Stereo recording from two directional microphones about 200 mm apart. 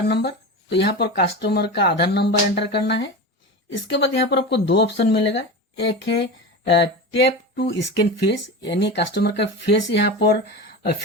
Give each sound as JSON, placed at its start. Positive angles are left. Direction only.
{"t": 0.1, "sound": "speech", "side_deg": 60}
{"t": 6.7, "sound": "a sound", "side_deg": 60}
{"t": 8.3, "sound": "speech", "side_deg": 60}